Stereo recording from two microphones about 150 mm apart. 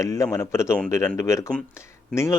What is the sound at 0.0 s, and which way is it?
Speech, 20° left (ahead or behind).